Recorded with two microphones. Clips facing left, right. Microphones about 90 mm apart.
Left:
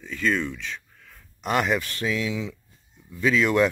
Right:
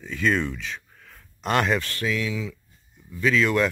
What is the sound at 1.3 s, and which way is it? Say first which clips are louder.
Speech: right 1 dB; 10° left (ahead or behind).